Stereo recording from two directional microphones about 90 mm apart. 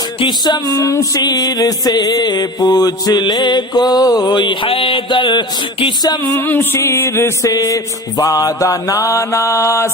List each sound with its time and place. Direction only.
0.2 s music: 55° left (ahead or behind)
6.3 s music: 25° left (ahead or behind)
7.5 s mantra: 35° left (ahead or behind)